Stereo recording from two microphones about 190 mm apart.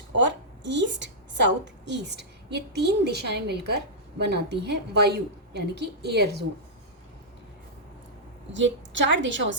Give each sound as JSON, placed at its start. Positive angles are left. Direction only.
{"t": 0.2, "sound": "a woman's voice", "side_deg": -70}
{"t": 8.5, "sound": "a woman's voice", "side_deg": -75}